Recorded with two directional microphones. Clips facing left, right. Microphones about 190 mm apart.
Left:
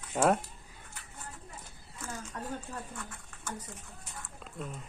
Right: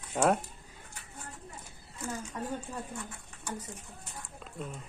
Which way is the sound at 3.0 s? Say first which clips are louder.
Right 1 dB; 10° right (ahead or behind).